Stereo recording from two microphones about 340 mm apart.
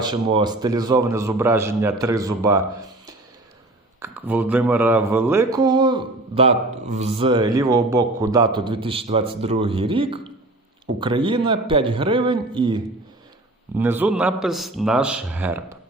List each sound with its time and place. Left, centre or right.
0.0 s speech: centre
4.0 s a man's voice: centre